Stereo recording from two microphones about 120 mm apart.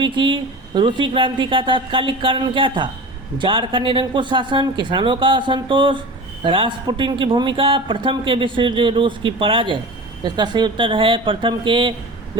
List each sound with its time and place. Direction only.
0.0 s a man's voice: 40° right (ahead or behind)